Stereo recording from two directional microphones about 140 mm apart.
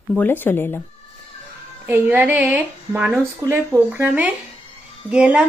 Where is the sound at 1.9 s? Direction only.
10° right (ahead or behind).